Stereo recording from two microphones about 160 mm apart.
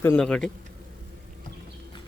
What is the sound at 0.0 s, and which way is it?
Speech, 10° left (ahead or behind).